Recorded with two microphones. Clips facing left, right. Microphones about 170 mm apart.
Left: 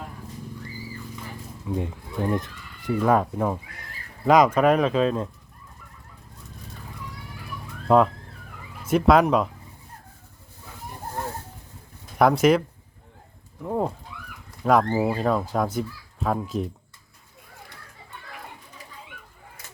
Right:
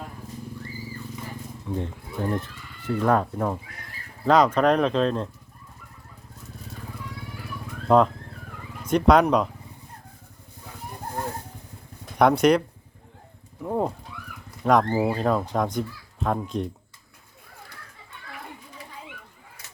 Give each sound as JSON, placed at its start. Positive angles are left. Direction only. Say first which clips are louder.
{"t": 1.7, "sound": "speech", "louder": "left 2 dB", "side_deg": 10}
{"t": 7.9, "sound": "speech", "louder": "even", "side_deg": 5}
{"t": 12.1, "sound": "speech", "louder": "even", "side_deg": 0}